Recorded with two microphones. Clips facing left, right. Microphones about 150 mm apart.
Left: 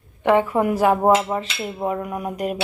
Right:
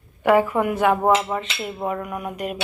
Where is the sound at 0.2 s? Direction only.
25° left (ahead or behind).